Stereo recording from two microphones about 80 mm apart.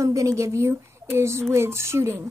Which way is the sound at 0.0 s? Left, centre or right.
Right.